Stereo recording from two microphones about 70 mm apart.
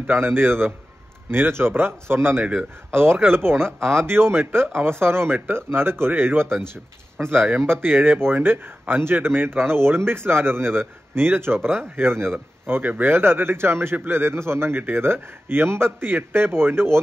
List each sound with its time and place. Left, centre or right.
0.0 s a man's voice: right